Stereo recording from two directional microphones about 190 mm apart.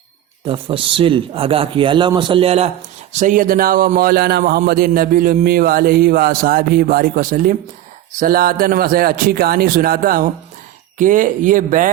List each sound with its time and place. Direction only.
0.4 s a man's voice: 25° right (ahead or behind); by 11.9 s 45° right (ahead or behind)